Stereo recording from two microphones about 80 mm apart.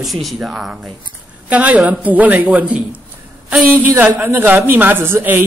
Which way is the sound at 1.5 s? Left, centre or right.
Centre.